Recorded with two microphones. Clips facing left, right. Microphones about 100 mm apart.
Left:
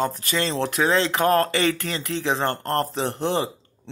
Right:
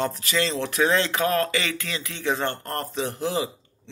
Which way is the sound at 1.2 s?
45° left (ahead or behind).